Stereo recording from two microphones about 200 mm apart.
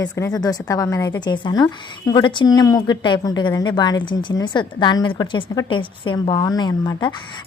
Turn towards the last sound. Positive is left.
turn(degrees=20)  # may be behind; listen again after turning